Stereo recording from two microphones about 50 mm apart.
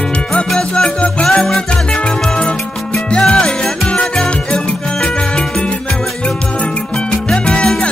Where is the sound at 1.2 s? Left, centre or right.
Centre.